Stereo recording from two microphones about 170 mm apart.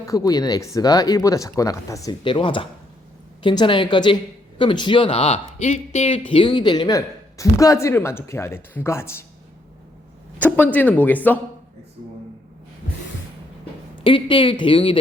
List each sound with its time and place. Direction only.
0.0 s speech: 20° left (ahead or behind)
10.3 s speech: 10° left (ahead or behind)
14.0 s speech: 30° left (ahead or behind)